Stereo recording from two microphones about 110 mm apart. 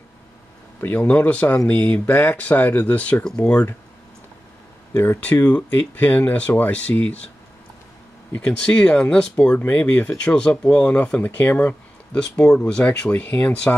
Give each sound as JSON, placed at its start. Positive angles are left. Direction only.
{"t": 0.7, "sound": "speech", "side_deg": 15}
{"t": 4.9, "sound": "speech", "side_deg": 15}
{"t": 8.4, "sound": "speech", "side_deg": 10}